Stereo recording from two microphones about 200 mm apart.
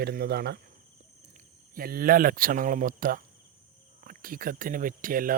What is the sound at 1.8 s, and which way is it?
Speech, 45° right (ahead or behind).